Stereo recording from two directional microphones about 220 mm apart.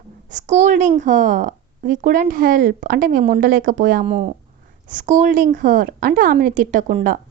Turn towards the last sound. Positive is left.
turn(degrees=-35)  # may be behind; listen again after turning